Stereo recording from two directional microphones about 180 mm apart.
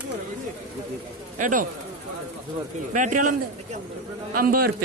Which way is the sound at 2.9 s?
45° right (ahead or behind).